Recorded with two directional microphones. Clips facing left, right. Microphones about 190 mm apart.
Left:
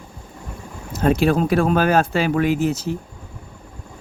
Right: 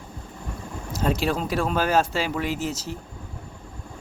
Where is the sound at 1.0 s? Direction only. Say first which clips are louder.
Left 8 dB; 55° left (ahead or behind).